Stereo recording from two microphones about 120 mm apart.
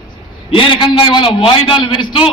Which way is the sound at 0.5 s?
45° left (ahead or behind).